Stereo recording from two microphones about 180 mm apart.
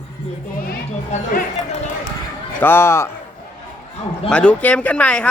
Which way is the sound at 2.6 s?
15° left (ahead or behind).